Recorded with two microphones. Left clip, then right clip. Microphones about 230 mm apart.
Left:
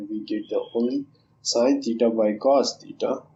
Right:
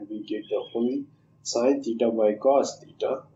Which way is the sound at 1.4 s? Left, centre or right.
Left.